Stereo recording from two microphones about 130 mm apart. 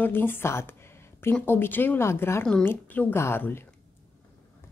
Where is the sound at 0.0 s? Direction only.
15° left (ahead or behind).